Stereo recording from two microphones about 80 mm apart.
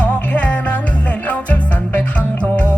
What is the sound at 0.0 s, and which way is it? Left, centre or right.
Music, centre.